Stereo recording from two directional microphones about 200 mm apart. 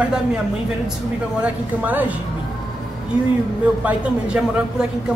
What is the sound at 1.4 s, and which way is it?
Speech, 10° right (ahead or behind).